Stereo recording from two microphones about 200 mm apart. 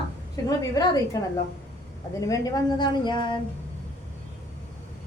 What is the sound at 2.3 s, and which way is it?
A woman's voice, 15° left (ahead or behind).